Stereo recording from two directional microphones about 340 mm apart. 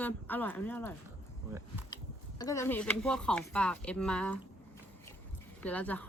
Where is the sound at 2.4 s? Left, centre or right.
Centre.